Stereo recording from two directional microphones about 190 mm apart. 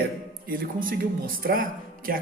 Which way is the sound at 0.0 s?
50° right (ahead or behind).